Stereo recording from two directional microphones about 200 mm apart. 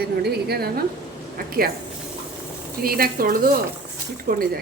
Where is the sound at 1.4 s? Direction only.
50° right (ahead or behind).